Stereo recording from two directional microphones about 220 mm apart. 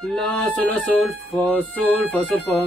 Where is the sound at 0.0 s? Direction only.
Centre (ahead or behind).